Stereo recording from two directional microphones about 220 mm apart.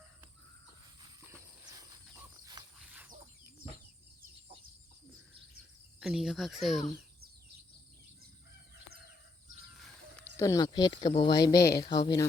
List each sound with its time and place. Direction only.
1.3 s a sound: 15° right (ahead or behind)
2.4 s horse: 15° right (ahead or behind)
2.7 s dog: 5° right (ahead or behind)
6.0 s speech: centre (ahead or behind)
10.2 s speech: 15° left (ahead or behind)